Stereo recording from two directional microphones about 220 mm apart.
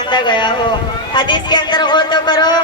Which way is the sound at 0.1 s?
20° left (ahead or behind).